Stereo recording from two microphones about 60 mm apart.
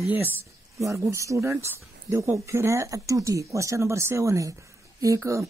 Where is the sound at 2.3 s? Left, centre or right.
Right.